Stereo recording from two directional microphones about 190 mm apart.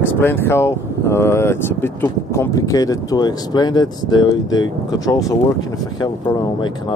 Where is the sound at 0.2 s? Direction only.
10° left (ahead or behind).